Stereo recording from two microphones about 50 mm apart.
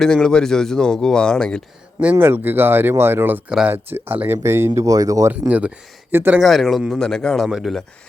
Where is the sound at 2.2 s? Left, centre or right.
Right.